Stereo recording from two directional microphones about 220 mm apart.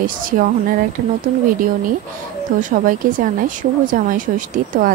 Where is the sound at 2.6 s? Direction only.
35° right (ahead or behind).